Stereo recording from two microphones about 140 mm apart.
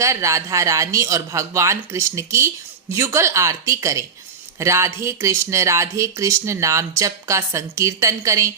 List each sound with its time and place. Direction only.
0.0 s speech: 20° right (ahead or behind)